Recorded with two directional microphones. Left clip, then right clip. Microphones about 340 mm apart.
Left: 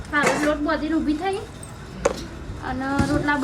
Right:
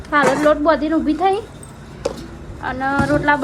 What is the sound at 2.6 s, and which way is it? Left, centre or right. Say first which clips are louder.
Speech: right 6 dB; centre.